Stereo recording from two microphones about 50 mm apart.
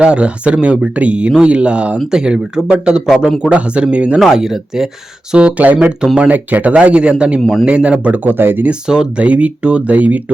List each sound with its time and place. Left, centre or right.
0.0 s speech: right
4.2 s speech: centre
5.3 s speech: right
8.9 s speech: right